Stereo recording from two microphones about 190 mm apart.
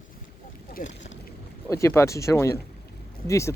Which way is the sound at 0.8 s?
45° left (ahead or behind).